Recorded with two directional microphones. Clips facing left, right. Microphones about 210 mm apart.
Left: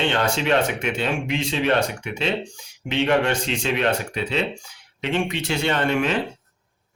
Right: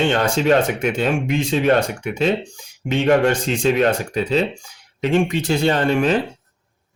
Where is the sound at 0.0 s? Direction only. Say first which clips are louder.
Right 4 dB; 45° right (ahead or behind).